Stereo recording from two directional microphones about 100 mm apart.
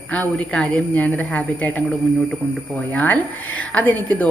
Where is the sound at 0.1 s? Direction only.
10° left (ahead or behind).